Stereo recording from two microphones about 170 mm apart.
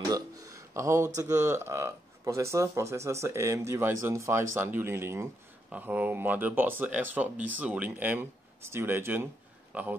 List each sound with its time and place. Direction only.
0.1 s speech: 20° right (ahead or behind)